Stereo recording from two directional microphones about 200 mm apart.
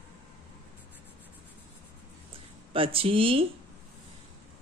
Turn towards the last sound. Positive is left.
turn(degrees=-25)  # may be behind; listen again after turning